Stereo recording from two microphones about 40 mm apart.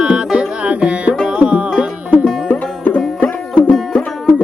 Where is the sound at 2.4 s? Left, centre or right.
Left.